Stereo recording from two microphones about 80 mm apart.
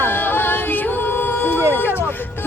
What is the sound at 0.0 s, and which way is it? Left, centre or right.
Music, left.